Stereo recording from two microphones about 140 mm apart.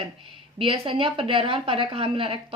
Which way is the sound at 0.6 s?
40° right (ahead or behind).